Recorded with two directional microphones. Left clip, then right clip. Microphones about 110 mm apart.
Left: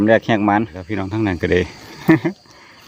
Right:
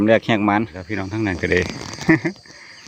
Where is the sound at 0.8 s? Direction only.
5° left (ahead or behind).